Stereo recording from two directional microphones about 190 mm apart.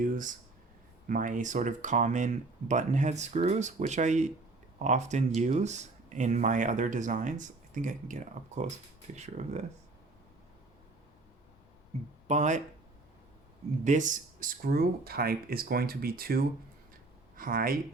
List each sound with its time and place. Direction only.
0.0 s speech: 45° right (ahead or behind)
12.3 s speech: 40° right (ahead or behind)
13.8 s speech: 40° right (ahead or behind)